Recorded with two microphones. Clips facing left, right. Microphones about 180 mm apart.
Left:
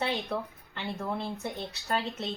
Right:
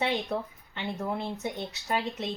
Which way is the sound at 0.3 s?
15° right (ahead or behind).